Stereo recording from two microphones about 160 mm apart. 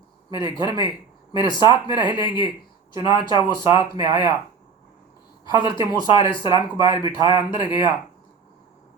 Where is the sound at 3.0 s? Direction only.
20° right (ahead or behind).